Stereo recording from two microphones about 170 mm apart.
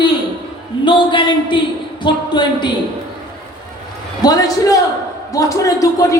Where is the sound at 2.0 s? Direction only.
25° left (ahead or behind).